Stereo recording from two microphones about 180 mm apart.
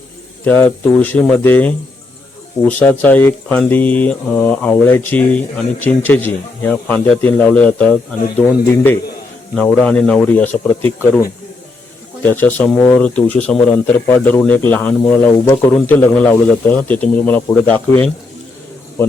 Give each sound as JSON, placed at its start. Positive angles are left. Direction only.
{"t": 0.4, "sound": "speech", "side_deg": 10}
{"t": 12.2, "sound": "speech", "side_deg": 10}